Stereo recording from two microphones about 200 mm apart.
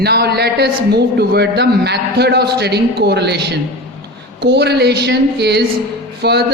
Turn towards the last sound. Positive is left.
turn(degrees=-55)  # may be behind; listen again after turning